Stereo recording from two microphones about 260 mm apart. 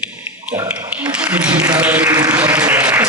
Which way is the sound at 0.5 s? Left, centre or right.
Centre.